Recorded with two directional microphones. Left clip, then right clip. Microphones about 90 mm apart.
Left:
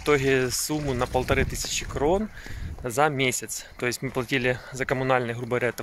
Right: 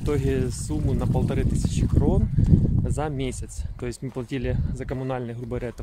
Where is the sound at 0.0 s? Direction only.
35° right (ahead or behind).